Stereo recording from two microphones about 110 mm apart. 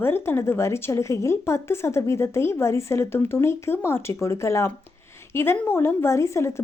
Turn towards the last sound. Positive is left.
turn(degrees=25)  # may be behind; listen again after turning